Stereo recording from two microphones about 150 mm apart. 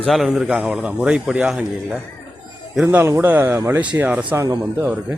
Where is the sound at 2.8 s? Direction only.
15° right (ahead or behind).